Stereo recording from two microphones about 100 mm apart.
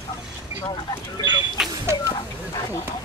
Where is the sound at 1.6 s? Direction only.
5° right (ahead or behind).